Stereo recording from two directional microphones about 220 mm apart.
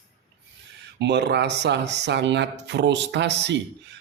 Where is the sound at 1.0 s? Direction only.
50° right (ahead or behind).